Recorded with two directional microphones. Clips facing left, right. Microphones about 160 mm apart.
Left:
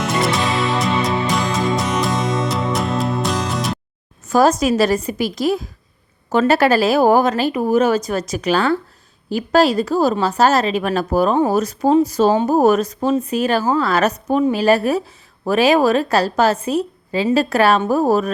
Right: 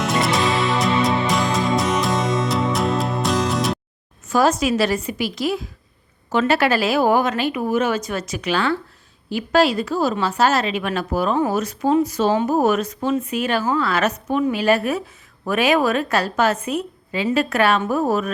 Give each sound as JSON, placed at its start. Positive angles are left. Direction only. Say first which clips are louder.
{"t": 0.0, "sound": "music", "louder": "left 1 dB", "side_deg": 0}
{"t": 4.3, "sound": "a woman's voice", "louder": "left 3 dB", "side_deg": 40}